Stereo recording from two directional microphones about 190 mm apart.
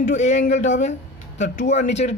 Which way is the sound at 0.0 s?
40° left (ahead or behind).